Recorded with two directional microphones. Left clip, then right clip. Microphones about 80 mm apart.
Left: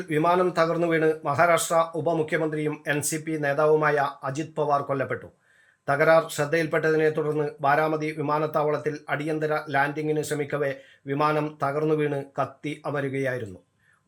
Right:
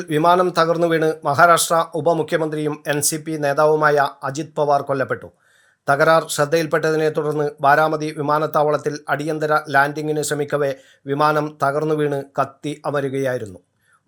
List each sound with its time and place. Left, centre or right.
0.1 s speech: right
11.1 s speech: right